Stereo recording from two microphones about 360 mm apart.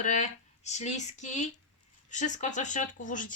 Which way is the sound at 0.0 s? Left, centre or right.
Centre.